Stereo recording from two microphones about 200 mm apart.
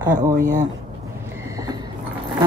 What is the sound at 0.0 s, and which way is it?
Speech, 10° right (ahead or behind).